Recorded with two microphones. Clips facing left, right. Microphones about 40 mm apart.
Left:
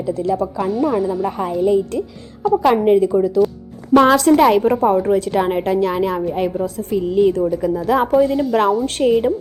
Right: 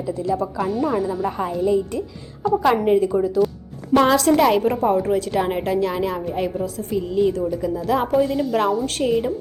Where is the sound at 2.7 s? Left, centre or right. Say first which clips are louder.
Left 4 dB; left.